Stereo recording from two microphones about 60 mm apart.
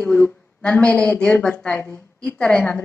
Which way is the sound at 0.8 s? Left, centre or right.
Centre.